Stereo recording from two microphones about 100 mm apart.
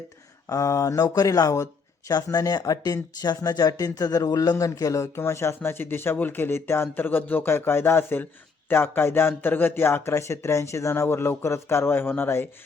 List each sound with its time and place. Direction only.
0.4 s speech: 35° left (ahead or behind)